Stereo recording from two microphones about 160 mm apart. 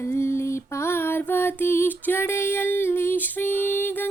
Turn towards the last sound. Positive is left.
turn(degrees=10)  # may be behind; listen again after turning